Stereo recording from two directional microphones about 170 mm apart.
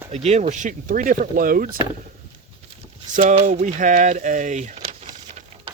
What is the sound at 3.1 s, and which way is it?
Speech, 50° right (ahead or behind).